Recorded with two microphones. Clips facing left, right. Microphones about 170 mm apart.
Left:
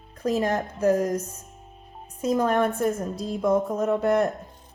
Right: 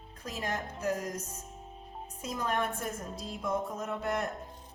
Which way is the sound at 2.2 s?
50° left (ahead or behind).